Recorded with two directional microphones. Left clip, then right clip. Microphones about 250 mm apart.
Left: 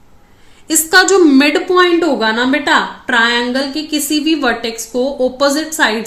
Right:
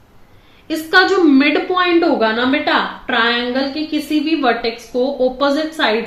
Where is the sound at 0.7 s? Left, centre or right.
Left.